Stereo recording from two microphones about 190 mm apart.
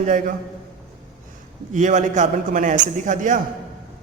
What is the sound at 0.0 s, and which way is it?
Speech, 40° right (ahead or behind).